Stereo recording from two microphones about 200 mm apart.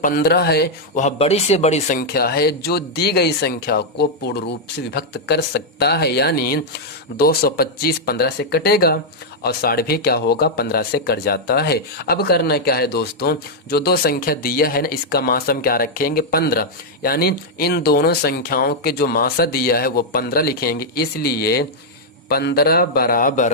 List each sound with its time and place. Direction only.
0.0 s speech: 50° left (ahead or behind)
0.9 s speech: 35° left (ahead or behind)